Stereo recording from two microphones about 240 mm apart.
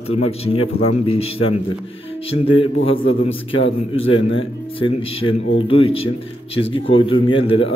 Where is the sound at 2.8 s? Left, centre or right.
Left.